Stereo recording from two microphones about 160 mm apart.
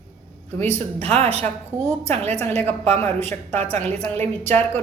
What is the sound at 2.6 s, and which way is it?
A woman's voice, 10° left (ahead or behind).